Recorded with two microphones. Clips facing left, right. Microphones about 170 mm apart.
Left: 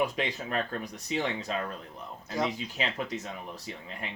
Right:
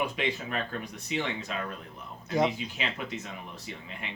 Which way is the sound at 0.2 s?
35° left (ahead or behind).